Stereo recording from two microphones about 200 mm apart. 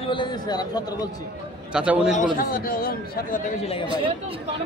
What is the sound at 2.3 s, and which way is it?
Speech, 45° left (ahead or behind).